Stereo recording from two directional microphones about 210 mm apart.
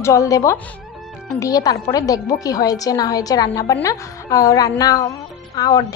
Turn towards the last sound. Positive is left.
turn(degrees=15)  # may be behind; listen again after turning